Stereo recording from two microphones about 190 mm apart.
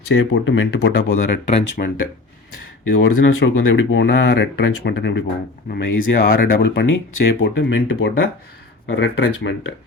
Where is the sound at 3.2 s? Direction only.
80° left; by 5.2 s 60° left (ahead or behind).